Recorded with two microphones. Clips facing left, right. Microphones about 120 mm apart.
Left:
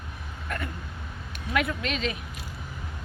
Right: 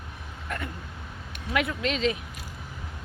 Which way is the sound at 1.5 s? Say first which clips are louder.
Right 1 dB; 20° right (ahead or behind).